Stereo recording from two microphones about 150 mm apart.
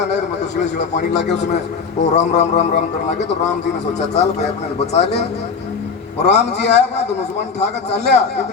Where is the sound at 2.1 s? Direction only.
50° left (ahead or behind).